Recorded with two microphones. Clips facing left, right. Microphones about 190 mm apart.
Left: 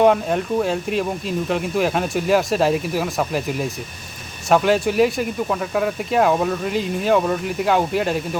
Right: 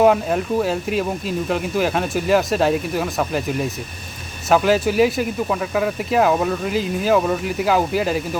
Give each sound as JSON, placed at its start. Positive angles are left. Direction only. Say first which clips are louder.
{"t": 0.0, "sound": "speech", "louder": "even", "side_deg": 0}